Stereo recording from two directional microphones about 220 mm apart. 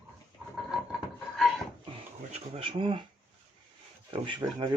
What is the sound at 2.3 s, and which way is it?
Speech, 25° right (ahead or behind).